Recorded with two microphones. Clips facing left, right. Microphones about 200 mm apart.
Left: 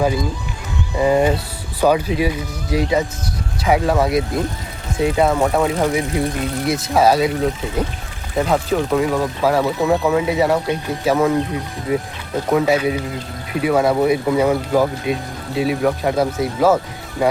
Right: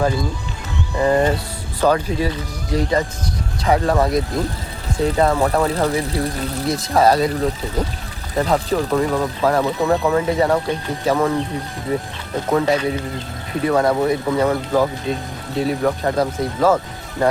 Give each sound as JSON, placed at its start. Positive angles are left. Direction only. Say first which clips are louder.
{"t": 0.9, "sound": "speech", "louder": "left 1 dB", "side_deg": 10}
{"t": 12.5, "sound": "speech", "louder": "left 1 dB", "side_deg": 10}